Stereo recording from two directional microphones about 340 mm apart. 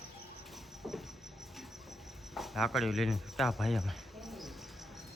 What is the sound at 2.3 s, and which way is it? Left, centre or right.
Speech, centre.